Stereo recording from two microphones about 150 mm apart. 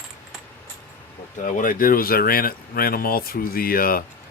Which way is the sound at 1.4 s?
60° left (ahead or behind).